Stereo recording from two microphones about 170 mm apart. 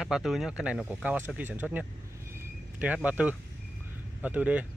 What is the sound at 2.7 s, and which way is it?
Speech, 10° right (ahead or behind).